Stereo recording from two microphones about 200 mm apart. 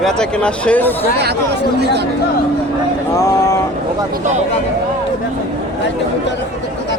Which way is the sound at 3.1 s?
15° left (ahead or behind).